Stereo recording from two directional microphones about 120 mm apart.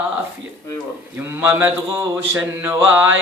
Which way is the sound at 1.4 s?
15° right (ahead or behind).